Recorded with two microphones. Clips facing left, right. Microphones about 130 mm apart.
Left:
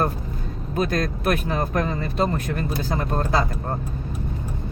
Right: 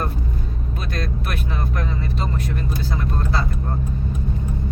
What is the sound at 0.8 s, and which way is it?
Speech, 45° left (ahead or behind).